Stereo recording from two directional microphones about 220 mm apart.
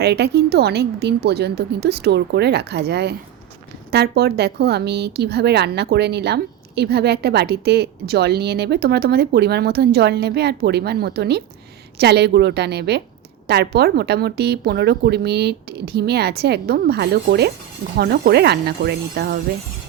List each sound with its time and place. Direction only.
0.0 s a woman's voice: 50° right (ahead or behind)